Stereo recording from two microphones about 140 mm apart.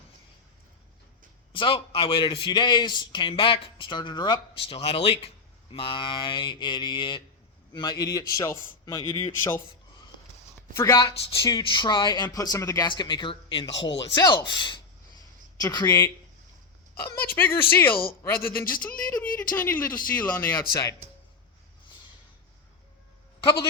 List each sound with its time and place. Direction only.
1.5 s a man's voice: 35° left (ahead or behind); by 9.6 s 20° left (ahead or behind)
10.8 s a man's voice: 20° left (ahead or behind)
11.0 s a man's voice: 30° left (ahead or behind)
17.0 s speech: 15° left (ahead or behind)
23.4 s speech: 30° left (ahead or behind)